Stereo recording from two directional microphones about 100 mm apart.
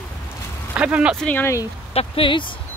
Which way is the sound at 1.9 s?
90° left.